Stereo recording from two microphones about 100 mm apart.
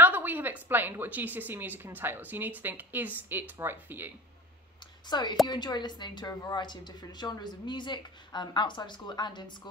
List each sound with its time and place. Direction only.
0.0 s a woman's voice: 20° right (ahead or behind)
5.1 s speech: 45° left (ahead or behind)